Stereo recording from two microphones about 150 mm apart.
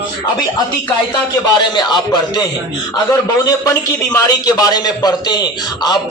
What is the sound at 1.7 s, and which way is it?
Speech, 30° left (ahead or behind).